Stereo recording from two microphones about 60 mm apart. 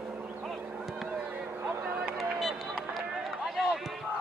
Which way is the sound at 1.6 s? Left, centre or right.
Right.